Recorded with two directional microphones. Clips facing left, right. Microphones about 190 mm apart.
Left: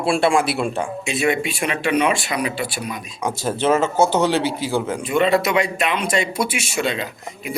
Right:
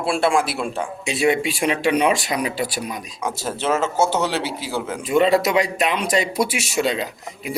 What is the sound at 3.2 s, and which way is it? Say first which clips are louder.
Speech: left 4 dB; 5° right (ahead or behind).